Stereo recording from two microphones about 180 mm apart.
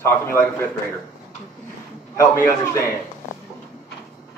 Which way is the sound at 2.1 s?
15° left (ahead or behind).